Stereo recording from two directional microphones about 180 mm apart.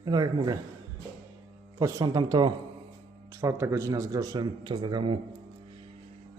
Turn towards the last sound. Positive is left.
turn(degrees=-25)  # may be behind; listen again after turning